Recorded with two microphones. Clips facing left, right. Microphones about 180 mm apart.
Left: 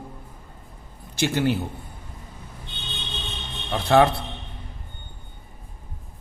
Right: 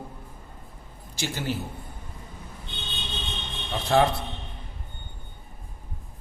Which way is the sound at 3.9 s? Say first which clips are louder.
Left 4 dB; 65° left (ahead or behind).